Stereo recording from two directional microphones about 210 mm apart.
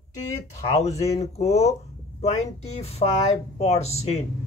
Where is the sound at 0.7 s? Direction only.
30° left (ahead or behind).